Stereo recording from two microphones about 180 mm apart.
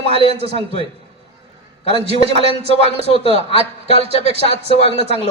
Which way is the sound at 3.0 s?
35° left (ahead or behind).